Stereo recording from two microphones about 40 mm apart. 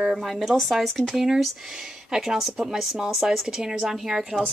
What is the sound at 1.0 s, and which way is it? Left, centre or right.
A woman's voice, centre.